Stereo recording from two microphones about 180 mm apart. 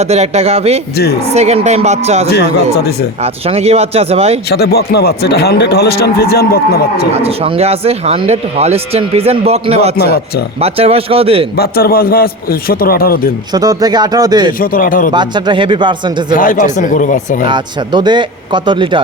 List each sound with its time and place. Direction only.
0.0 s speech: 35° right (ahead or behind)
2.3 s a man's voice: 65° left (ahead or behind)
3.2 s speech: 35° right (ahead or behind)
4.4 s a man's voice: 65° left (ahead or behind)
7.1 s speech: 35° right (ahead or behind)
11.5 s a man's voice: 55° left (ahead or behind)
13.5 s speech: 20° right (ahead or behind)
14.6 s speech: 50° left (ahead or behind)
15.1 s speech: 25° right (ahead or behind)
16.3 s speech: 50° left (ahead or behind)
17.4 s speech: 25° right (ahead or behind)